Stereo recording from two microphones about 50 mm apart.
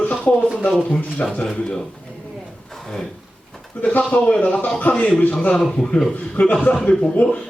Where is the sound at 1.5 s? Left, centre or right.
Centre.